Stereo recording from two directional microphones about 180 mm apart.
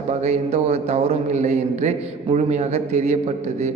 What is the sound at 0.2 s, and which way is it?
A man's voice, 35° right (ahead or behind).